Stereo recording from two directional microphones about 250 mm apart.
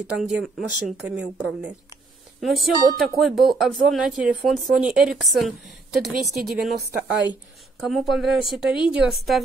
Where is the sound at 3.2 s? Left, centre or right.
Centre.